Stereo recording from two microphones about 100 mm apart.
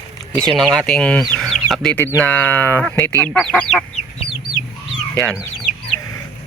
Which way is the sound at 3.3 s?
5° left (ahead or behind).